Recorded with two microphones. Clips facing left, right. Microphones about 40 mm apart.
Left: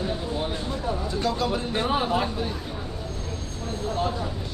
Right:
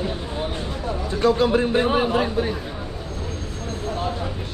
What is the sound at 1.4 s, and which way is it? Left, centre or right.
Speech, right.